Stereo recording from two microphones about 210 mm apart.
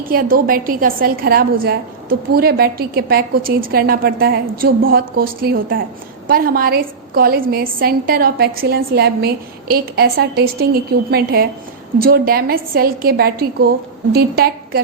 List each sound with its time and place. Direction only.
0.0 s a woman's voice: 45° right (ahead or behind)